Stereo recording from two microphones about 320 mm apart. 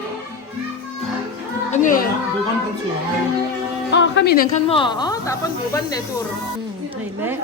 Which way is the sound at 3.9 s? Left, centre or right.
Left.